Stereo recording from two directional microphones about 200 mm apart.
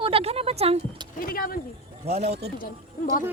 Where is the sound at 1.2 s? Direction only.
45° left (ahead or behind).